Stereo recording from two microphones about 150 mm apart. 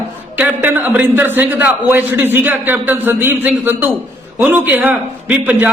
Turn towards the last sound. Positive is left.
turn(degrees=-10)  # may be behind; listen again after turning